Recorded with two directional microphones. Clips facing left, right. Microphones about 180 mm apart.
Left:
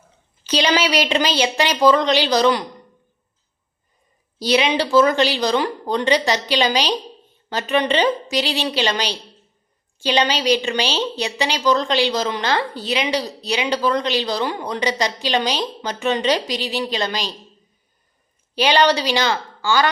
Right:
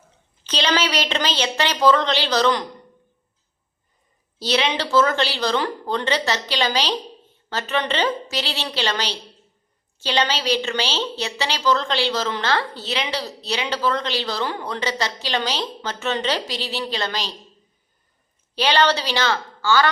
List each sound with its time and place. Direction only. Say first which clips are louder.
0.4 s a woman's voice: left 3 dB; 10° left (ahead or behind)
4.4 s a woman's voice: left 4 dB; 10° left (ahead or behind)
18.5 s a woman's voice: left 3 dB; 15° left (ahead or behind)